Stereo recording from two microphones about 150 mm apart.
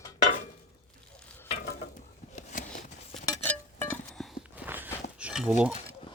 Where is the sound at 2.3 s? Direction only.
60° left (ahead or behind).